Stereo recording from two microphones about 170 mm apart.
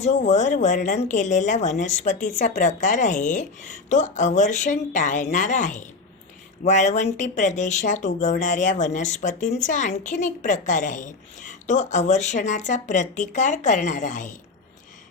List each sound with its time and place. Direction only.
0.0 s speech: 45° left (ahead or behind)